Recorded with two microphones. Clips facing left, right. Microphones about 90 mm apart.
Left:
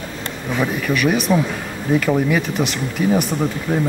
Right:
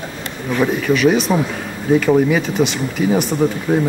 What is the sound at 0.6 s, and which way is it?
Speech, 5° left (ahead or behind).